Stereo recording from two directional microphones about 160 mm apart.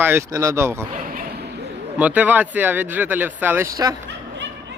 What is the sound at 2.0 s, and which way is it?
Speech, 10° right (ahead or behind).